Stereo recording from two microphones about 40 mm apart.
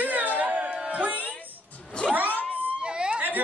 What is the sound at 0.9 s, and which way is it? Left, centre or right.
Music, right.